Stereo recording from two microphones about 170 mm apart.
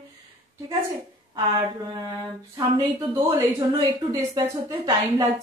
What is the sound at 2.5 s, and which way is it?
A woman's voice, 15° right (ahead or behind).